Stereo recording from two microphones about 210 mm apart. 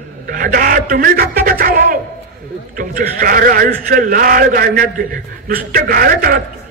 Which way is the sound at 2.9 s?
40° right (ahead or behind).